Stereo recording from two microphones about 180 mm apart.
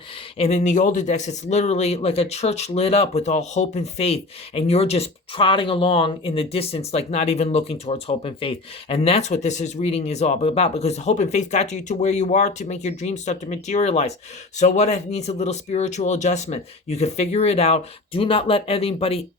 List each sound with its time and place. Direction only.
0.3 s speech: 40° left (ahead or behind)